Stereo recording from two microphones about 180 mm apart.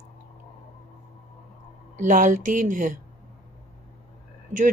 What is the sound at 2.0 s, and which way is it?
Speech, 45° right (ahead or behind).